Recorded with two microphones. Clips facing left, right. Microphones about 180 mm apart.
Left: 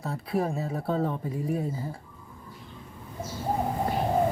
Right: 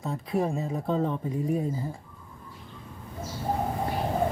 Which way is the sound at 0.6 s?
20° right (ahead or behind).